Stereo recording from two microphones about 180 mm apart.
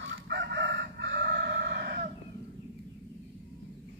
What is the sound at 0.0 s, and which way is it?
Chicken, 70° right (ahead or behind).